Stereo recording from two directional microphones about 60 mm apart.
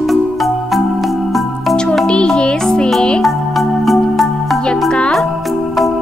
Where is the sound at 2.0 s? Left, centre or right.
Centre.